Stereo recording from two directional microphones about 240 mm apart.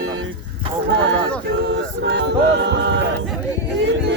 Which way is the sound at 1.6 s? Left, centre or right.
Right.